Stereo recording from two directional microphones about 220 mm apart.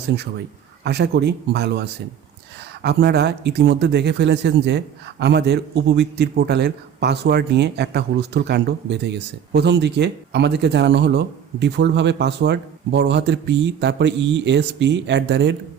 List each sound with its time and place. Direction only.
0.9 s a man's voice: 50° right (ahead or behind)